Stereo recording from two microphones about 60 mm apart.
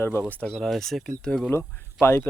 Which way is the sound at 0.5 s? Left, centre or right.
Centre.